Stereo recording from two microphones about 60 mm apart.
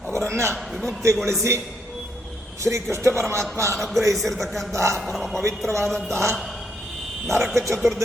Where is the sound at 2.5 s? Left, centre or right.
Right.